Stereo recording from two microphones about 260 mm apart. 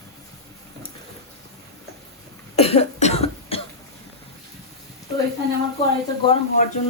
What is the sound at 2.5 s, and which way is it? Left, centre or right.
Cough, left.